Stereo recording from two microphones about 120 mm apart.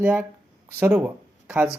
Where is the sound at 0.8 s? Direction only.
15° right (ahead or behind).